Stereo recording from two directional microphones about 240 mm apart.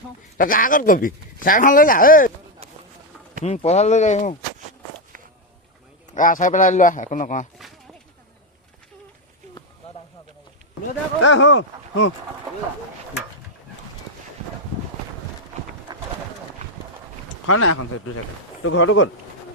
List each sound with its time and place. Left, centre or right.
0.3 s speech: left
3.4 s speech: left
6.1 s speech: left
11.2 s speech: left
15.9 s clip-clop: centre
17.4 s speech: left
18.6 s speech: left